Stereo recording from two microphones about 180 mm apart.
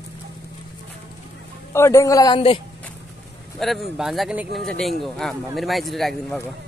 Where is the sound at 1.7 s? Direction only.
15° left (ahead or behind).